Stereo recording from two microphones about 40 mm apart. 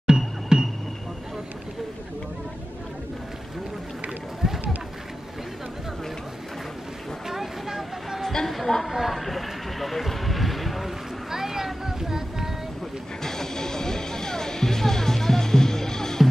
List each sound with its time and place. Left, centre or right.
0.0 s music: centre
4.4 s boat: centre
7.2 s vehicle: centre
8.2 s a sound: centre
8.9 s vehicle: centre
11.2 s music: centre
13.2 s music: centre